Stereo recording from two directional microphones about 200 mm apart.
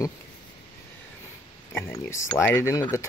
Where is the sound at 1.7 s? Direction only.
15° left (ahead or behind).